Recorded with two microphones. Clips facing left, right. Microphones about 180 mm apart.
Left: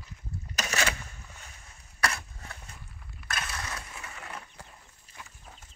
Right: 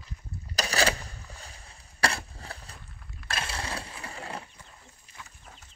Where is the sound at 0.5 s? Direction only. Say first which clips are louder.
Right 4 dB; 35° right (ahead or behind).